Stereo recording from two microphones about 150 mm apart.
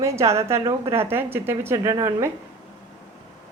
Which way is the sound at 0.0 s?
20° right (ahead or behind).